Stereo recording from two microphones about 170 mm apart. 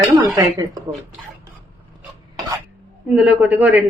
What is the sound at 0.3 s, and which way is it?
Speech, 20° right (ahead or behind).